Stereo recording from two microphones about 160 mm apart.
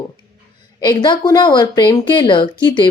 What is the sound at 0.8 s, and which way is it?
Speech, 25° left (ahead or behind).